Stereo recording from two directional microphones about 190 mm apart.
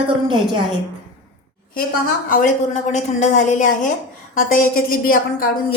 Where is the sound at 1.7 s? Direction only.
50° left (ahead or behind).